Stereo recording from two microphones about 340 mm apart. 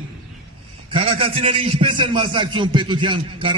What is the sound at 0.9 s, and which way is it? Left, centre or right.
A man's voice, centre.